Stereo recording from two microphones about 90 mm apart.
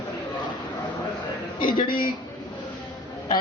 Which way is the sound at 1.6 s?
70° left (ahead or behind).